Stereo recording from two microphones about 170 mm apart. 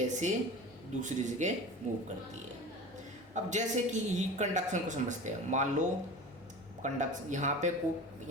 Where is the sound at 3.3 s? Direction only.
45° right (ahead or behind).